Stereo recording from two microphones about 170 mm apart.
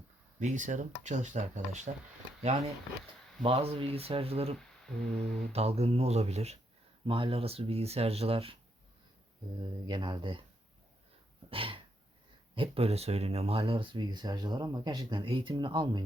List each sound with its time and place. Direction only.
0.3 s speech: 45° right (ahead or behind)
9.6 s speech: 25° right (ahead or behind)
11.5 s dog: 30° right (ahead or behind)
12.5 s speech: 35° right (ahead or behind)